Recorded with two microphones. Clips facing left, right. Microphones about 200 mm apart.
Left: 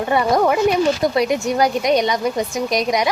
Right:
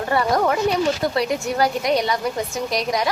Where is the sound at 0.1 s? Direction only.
20° left (ahead or behind).